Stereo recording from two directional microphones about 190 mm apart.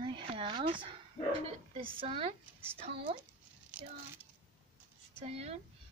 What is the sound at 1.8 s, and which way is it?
Speech, 30° right (ahead or behind).